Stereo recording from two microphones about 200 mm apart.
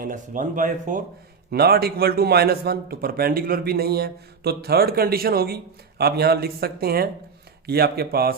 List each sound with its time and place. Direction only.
0.0 s speech: 40° right (ahead or behind)
1.5 s a man's voice: 50° right (ahead or behind)